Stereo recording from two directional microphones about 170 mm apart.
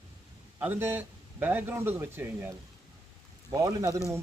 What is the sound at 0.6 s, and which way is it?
A man's voice, 10° right (ahead or behind).